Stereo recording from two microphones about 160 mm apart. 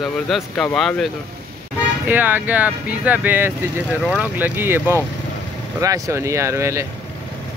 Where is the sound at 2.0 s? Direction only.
10° right (ahead or behind).